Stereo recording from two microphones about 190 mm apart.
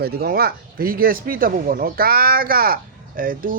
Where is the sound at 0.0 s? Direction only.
55° right (ahead or behind).